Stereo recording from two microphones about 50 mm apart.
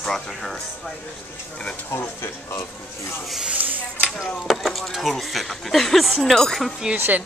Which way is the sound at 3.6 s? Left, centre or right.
Right.